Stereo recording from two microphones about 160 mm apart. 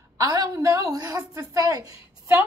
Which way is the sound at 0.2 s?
20° right (ahead or behind).